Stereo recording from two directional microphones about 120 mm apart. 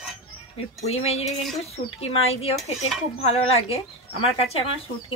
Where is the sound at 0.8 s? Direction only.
60° left (ahead or behind).